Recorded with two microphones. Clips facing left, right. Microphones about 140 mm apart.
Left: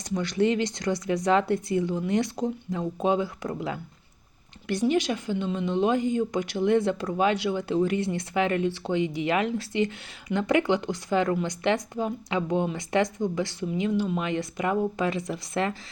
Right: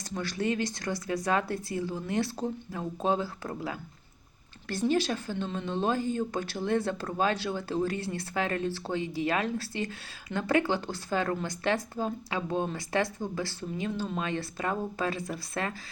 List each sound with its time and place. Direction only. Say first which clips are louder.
0.1 s speech: left 6 dB; 20° left (ahead or behind)